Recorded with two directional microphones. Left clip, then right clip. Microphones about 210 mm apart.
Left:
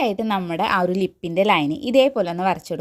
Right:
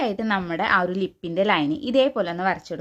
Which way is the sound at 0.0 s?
20° left (ahead or behind).